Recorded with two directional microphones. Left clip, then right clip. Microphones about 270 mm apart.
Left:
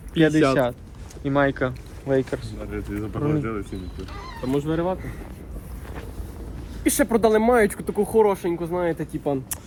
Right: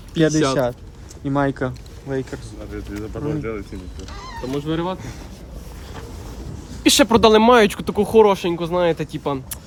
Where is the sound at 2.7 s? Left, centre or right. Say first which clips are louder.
Even; centre.